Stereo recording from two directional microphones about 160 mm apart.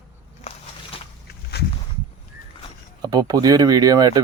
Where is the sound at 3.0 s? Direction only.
25° right (ahead or behind).